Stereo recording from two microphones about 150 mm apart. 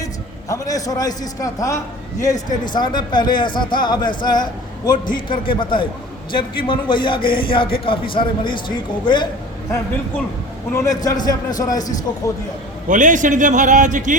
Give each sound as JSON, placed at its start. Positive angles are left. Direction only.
{"t": 0.0, "sound": "a man's voice", "side_deg": 20}
{"t": 10.7, "sound": "a man's voice", "side_deg": 25}
{"t": 12.9, "sound": "a man's voice", "side_deg": -60}